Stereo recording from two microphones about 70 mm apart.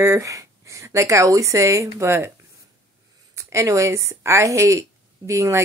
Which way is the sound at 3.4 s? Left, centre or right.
Right.